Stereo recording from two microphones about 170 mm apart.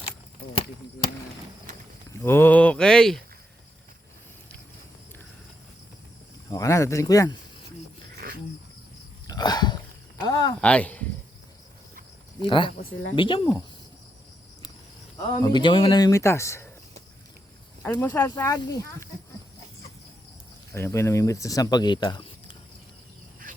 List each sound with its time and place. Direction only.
2.0 s speech: 15° left (ahead or behind)
6.5 s speech: 20° left (ahead or behind)
9.2 s a sound: 25° left (ahead or behind)
10.2 s speech: 25° left (ahead or behind)
10.6 s speech: 5° left (ahead or behind)
12.4 s speech: 30° left (ahead or behind)
15.4 s speech: 25° left (ahead or behind)
17.8 s speech: 15° left (ahead or behind)
20.7 s speech: 15° left (ahead or behind)